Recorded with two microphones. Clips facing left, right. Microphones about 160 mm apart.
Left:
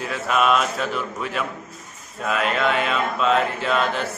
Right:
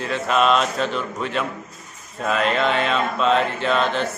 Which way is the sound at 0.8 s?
5° left (ahead or behind).